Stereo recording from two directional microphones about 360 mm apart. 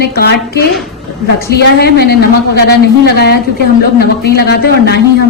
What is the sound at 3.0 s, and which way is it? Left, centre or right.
Speech, left.